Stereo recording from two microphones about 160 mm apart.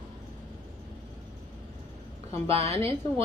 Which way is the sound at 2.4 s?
40° right (ahead or behind).